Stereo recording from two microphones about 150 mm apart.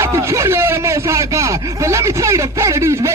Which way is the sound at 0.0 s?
20° right (ahead or behind).